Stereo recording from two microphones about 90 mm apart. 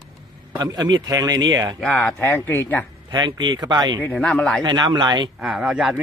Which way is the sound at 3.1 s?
55° right (ahead or behind).